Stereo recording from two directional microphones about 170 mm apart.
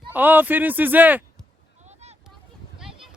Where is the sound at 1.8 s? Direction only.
40° right (ahead or behind).